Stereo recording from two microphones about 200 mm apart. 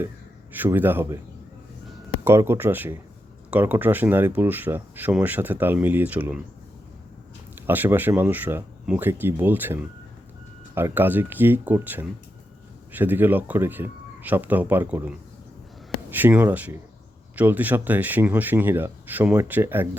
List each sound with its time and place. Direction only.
0.5 s speech: 10° right (ahead or behind)
2.2 s speech: 10° right (ahead or behind)
7.7 s speech: 10° right (ahead or behind)